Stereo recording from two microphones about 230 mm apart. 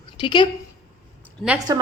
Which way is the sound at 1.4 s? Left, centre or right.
Centre.